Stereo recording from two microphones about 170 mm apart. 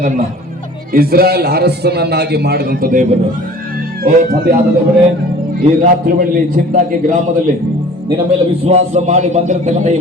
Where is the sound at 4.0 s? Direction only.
65° right (ahead or behind).